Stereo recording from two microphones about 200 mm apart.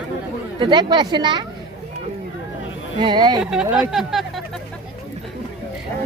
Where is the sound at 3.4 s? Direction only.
5° right (ahead or behind).